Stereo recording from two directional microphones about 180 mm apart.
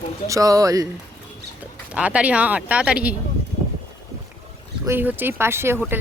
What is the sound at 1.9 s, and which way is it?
Speech, 5° right (ahead or behind).